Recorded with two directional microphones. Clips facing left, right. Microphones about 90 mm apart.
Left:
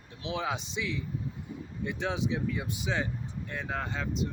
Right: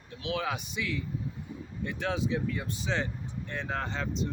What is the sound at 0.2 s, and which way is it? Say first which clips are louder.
Speech: right 1 dB; 25° left (ahead or behind).